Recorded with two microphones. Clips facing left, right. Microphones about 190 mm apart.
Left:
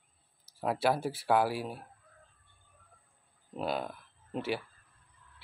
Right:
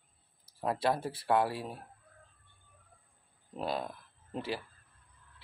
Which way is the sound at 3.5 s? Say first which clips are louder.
Left 1 dB; centre (ahead or behind).